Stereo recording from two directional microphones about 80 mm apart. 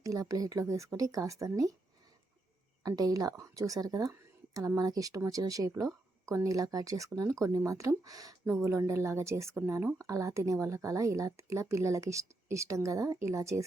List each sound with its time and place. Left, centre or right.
0.0 s speech: right
2.8 s speech: right
8.4 s speech: right